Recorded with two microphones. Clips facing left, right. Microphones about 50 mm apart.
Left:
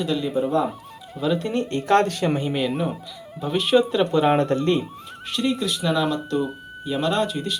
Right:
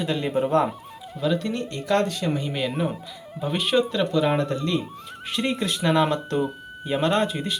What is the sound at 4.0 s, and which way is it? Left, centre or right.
Speech, left.